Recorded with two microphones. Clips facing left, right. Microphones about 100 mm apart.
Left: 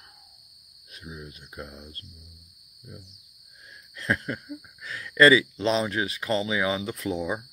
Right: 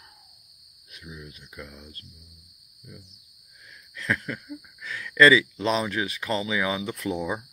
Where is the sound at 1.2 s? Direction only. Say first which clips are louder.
Left 2 dB; 35° left (ahead or behind).